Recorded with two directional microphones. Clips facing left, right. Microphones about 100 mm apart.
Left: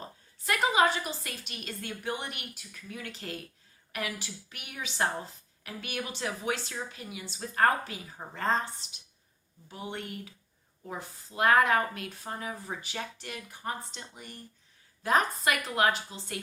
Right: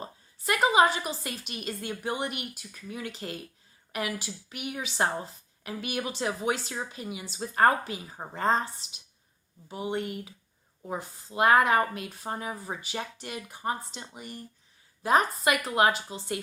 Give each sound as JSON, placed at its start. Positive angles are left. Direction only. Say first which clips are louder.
{"t": 0.4, "sound": "a woman's voice", "louder": "right 3 dB", "side_deg": -20}
{"t": 9.6, "sound": "a woman's voice", "louder": "right 7 dB", "side_deg": -20}